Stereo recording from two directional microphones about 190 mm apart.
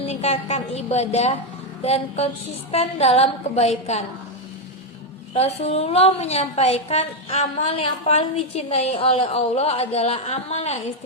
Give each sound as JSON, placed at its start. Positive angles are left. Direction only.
{"t": 0.0, "sound": "a woman's voice", "side_deg": 35}
{"t": 5.3, "sound": "a woman's voice", "side_deg": 30}